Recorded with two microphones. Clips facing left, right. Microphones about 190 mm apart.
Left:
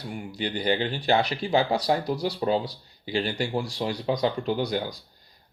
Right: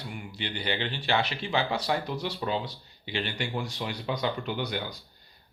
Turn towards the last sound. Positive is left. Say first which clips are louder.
# left 6 dB
turn(degrees=35)  # may be behind; listen again after turning